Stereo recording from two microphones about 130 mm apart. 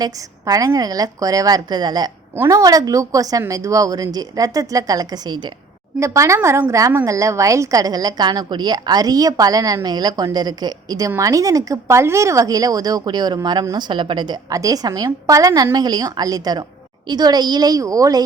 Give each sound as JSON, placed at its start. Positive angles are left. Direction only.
{"t": 0.0, "sound": "a woman's voice", "side_deg": -25}
{"t": 2.3, "sound": "a woman's voice", "side_deg": -20}
{"t": 6.0, "sound": "a woman's voice", "side_deg": -25}